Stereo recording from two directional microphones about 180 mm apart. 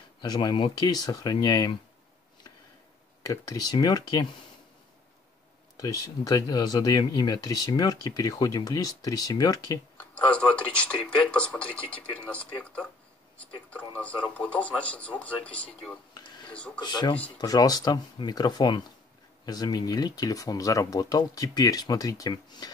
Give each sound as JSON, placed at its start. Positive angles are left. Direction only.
{"t": 0.2, "sound": "speech", "side_deg": 25}
{"t": 3.3, "sound": "speech", "side_deg": 20}
{"t": 5.8, "sound": "speech", "side_deg": 20}
{"t": 9.9, "sound": "speech", "side_deg": 10}
{"t": 16.8, "sound": "speech", "side_deg": 25}